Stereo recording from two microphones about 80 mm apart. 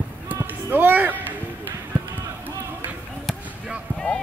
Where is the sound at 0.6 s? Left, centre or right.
Right.